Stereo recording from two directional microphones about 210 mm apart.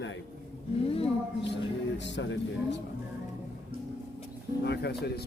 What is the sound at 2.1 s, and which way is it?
Speech, 60° left (ahead or behind).